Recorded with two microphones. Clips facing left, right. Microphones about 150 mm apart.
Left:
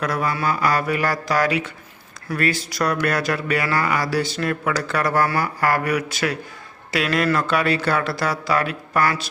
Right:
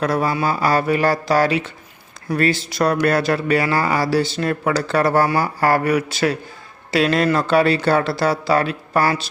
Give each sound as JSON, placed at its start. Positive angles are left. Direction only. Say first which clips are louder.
{"t": 0.0, "sound": "speech", "louder": "right 4 dB", "side_deg": -30}